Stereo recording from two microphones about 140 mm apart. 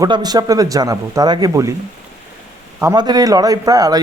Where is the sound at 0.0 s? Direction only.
30° right (ahead or behind).